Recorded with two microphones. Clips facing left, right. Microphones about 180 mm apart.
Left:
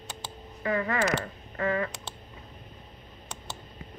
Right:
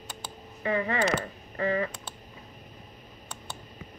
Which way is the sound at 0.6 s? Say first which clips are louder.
Even; 30° right (ahead or behind).